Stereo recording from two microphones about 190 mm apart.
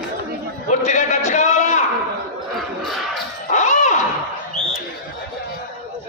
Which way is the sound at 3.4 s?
40° left (ahead or behind).